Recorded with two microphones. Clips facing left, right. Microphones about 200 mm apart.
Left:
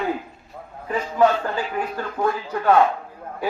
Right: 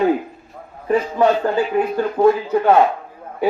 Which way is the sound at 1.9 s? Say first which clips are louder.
Right 11 dB; 25° right (ahead or behind).